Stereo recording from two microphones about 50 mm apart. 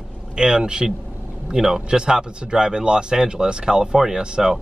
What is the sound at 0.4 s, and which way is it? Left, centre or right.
Speech, centre.